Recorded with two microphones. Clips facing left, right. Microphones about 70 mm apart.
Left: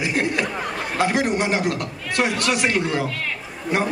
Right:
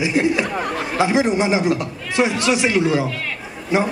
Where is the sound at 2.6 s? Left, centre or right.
Centre.